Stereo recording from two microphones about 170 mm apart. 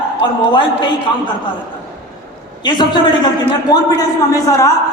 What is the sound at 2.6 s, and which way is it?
A man's voice, 25° left (ahead or behind).